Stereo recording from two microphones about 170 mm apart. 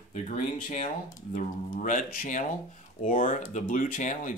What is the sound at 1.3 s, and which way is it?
Speech, 50° left (ahead or behind).